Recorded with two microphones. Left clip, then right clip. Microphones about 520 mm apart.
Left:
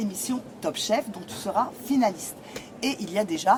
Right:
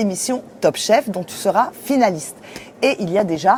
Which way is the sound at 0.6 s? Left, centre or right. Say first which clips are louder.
Right 11 dB; right.